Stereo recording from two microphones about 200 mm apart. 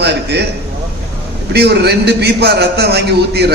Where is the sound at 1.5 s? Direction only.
55° right (ahead or behind).